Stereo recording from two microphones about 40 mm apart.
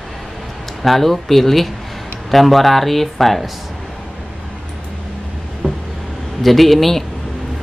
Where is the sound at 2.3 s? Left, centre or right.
Centre.